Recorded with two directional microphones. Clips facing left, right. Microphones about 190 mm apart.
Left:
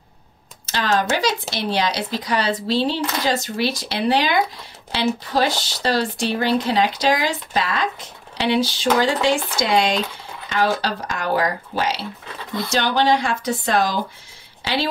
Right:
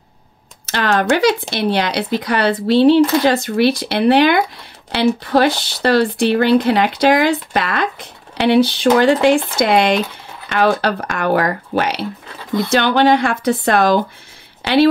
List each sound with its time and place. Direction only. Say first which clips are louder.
0.7 s speech: right 5 dB; 60° right (ahead or behind)